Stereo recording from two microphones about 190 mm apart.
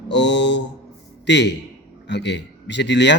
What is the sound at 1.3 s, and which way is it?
A man's voice, 65° left (ahead or behind).